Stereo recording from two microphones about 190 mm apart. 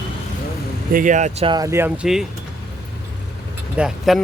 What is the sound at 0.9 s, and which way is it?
Speech, 45° right (ahead or behind).